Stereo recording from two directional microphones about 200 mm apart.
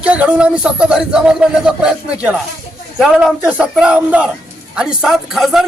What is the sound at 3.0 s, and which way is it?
A man's voice, 5° right (ahead or behind).